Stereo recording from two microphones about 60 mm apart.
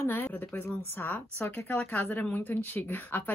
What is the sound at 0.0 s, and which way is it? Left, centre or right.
A woman's voice, left.